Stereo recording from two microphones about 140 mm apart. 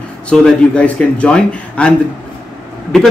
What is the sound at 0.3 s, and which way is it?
A man's voice, 10° left (ahead or behind).